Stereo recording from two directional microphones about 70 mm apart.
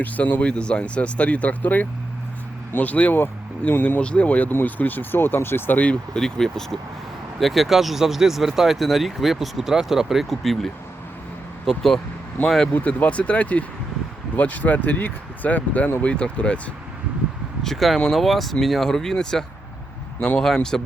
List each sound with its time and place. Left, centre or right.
0.0 s speech: left
6.1 s speech: centre
12.7 s speech: left
17.6 s a man's voice: centre
20.4 s speech: centre